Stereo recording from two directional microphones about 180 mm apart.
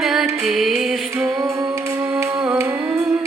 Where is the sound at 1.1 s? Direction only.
15° right (ahead or behind).